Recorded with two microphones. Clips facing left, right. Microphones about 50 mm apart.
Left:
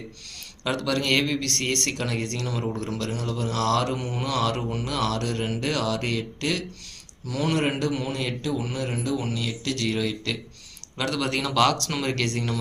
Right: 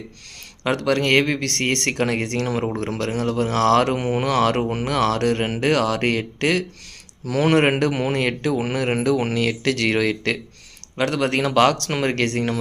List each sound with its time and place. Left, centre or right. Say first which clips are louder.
0.6 s a man's voice: right 6 dB; right
10.9 s speech: right 6 dB; right